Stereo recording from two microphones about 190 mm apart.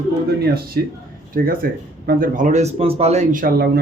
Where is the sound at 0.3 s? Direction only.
55° right (ahead or behind).